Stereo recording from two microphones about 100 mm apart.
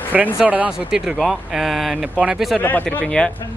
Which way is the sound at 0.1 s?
10° right (ahead or behind).